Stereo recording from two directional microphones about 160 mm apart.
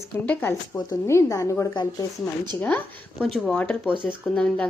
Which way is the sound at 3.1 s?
Centre (ahead or behind).